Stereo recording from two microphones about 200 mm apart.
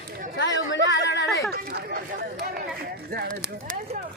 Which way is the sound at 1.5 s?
50° right (ahead or behind).